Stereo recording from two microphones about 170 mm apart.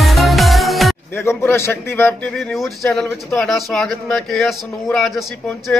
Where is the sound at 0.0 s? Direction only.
Centre (ahead or behind).